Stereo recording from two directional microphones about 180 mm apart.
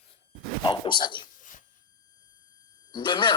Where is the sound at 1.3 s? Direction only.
45° left (ahead or behind).